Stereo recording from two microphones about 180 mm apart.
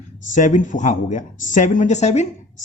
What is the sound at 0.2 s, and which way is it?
Speech, 45° left (ahead or behind).